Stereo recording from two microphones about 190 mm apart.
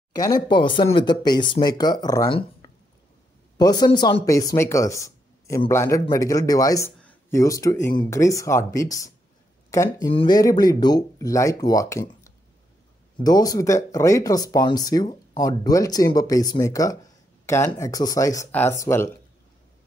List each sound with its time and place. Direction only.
0.1 s speech: 20° left (ahead or behind)